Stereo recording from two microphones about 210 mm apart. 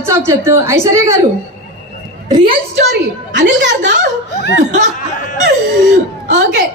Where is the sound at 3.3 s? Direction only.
55° right (ahead or behind).